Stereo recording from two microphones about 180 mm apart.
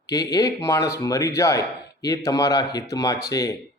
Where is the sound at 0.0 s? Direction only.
20° left (ahead or behind).